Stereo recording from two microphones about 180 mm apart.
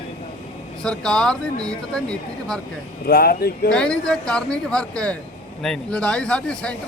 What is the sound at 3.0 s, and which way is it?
Speech, 55° left (ahead or behind).